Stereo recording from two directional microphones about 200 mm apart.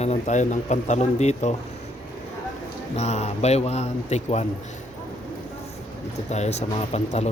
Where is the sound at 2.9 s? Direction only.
35° left (ahead or behind).